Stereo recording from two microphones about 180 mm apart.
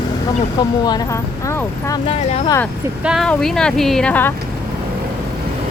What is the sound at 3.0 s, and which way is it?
Speech, centre (ahead or behind).